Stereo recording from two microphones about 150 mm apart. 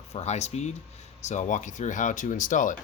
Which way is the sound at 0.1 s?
45° left (ahead or behind).